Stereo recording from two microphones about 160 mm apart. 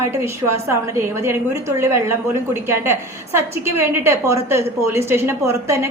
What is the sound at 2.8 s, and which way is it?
A woman's voice, 15° right (ahead or behind).